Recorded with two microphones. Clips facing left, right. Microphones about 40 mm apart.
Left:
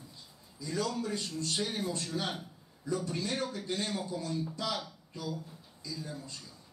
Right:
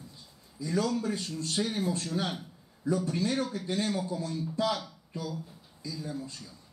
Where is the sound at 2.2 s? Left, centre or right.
Right.